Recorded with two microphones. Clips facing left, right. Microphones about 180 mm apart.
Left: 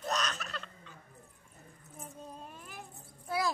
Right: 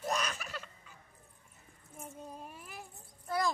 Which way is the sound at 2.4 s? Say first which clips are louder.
Even; 10° right (ahead or behind).